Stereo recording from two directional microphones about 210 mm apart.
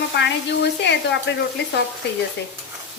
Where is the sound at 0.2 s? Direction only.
55° left (ahead or behind).